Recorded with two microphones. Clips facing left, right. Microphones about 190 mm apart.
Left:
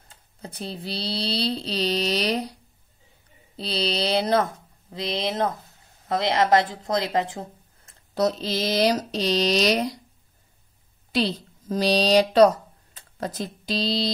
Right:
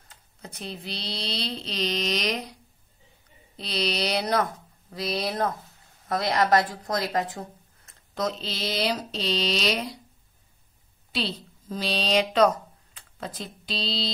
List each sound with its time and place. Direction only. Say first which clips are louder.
0.1 s speech: left 4 dB; 30° left (ahead or behind)
3.5 s speech: left 2 dB; 30° left (ahead or behind)
11.1 s speech: left 6 dB; 45° left (ahead or behind)